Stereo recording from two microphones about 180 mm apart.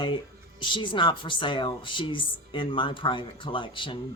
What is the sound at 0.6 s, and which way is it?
Speech, 25° left (ahead or behind).